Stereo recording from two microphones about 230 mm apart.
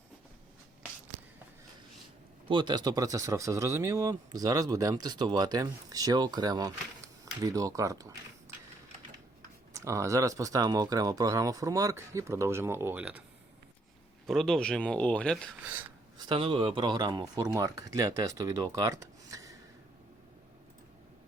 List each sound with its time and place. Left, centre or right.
2.5 s speech: centre
9.7 s speech: centre
14.3 s speech: centre
16.2 s speech: right